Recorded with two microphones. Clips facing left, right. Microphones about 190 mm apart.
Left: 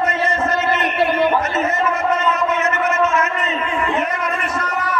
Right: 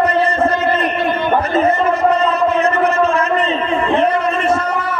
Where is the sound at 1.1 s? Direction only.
35° right (ahead or behind).